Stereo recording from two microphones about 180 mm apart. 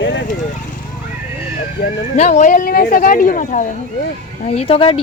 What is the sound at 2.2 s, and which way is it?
Speech, 40° left (ahead or behind).